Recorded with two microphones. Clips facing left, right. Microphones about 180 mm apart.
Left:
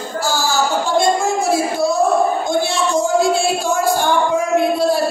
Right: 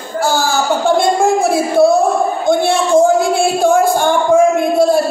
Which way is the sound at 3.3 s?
55° right (ahead or behind).